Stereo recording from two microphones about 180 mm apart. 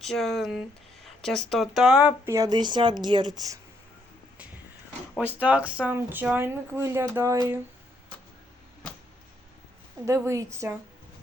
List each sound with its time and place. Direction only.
0.0 s speech: centre (ahead or behind); by 3.6 s 20° right (ahead or behind)
5.1 s speech: 10° right (ahead or behind)
10.1 s speech: 15° right (ahead or behind)